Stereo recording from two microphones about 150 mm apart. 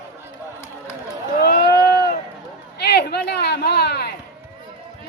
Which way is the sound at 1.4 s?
90° left.